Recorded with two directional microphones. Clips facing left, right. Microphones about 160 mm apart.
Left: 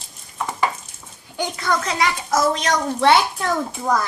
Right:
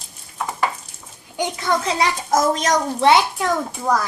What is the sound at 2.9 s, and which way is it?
A child's voice, 15° right (ahead or behind).